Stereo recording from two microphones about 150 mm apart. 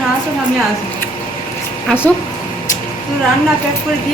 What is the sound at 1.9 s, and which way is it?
Speech, 10° left (ahead or behind).